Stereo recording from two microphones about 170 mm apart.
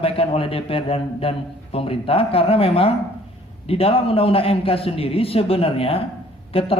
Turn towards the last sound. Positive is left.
turn(degrees=35)  # may be behind; listen again after turning